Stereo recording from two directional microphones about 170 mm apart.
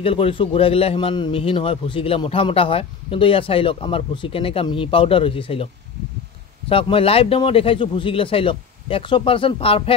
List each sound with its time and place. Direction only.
0.0 s a man's voice: 35° left (ahead or behind)
6.7 s a man's voice: 35° left (ahead or behind)